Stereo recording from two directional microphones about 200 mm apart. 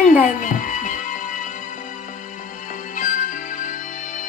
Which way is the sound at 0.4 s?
40° left (ahead or behind).